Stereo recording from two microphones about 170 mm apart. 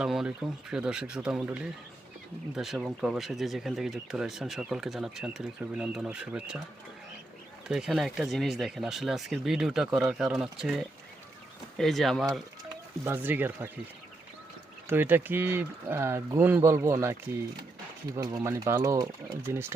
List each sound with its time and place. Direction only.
0.0 s speech: 5° right (ahead or behind)
7.7 s speech: 5° right (ahead or behind)
13.1 s speech: 10° right (ahead or behind)
14.8 s speech: 10° right (ahead or behind)